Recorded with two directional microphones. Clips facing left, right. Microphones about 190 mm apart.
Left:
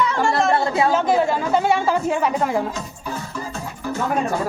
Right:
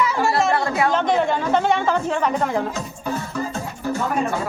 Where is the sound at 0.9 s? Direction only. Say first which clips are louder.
Even; 5° left (ahead or behind).